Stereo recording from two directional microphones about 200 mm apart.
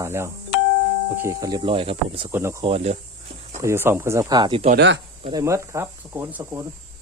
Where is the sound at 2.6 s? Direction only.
30° right (ahead or behind).